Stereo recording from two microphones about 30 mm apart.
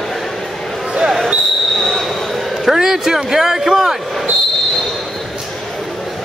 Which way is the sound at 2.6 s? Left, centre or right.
Centre.